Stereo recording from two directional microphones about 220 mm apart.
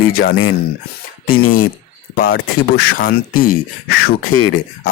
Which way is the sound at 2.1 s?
45° left (ahead or behind).